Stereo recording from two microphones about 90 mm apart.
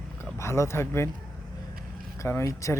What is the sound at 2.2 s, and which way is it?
Speech, 30° left (ahead or behind).